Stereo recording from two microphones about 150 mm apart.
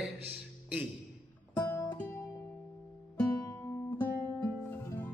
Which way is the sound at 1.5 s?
15° left (ahead or behind).